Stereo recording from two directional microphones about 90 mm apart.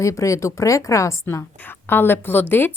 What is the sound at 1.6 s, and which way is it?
A woman's voice, 25° left (ahead or behind).